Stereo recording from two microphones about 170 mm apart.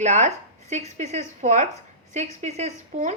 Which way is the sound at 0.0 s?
45° right (ahead or behind).